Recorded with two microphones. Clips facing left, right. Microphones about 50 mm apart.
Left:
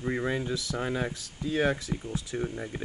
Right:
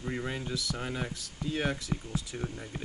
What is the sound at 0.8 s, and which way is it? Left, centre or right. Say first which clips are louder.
Speech: left 5 dB; left.